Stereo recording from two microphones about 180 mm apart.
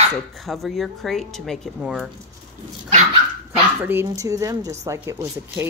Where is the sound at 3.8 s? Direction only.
10° right (ahead or behind).